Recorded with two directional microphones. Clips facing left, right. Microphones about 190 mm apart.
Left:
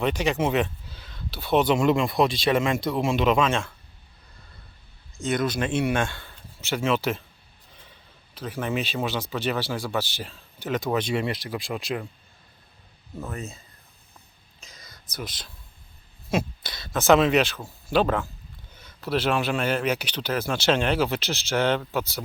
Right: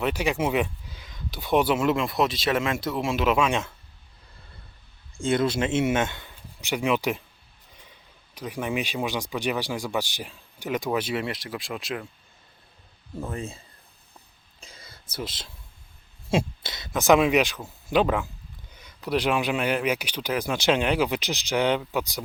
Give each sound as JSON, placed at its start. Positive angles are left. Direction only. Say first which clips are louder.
{"t": 0.0, "sound": "speech", "louder": "left 1 dB", "side_deg": -10}
{"t": 5.1, "sound": "speech", "louder": "right 2 dB", "side_deg": -30}
{"t": 8.4, "sound": "speech", "louder": "even", "side_deg": -15}
{"t": 13.3, "sound": "speech", "louder": "right 2 dB", "side_deg": -30}
{"t": 14.6, "sound": "a sound", "louder": "right 2 dB", "side_deg": -30}
{"t": 16.3, "sound": "speech", "louder": "right 1 dB", "side_deg": -25}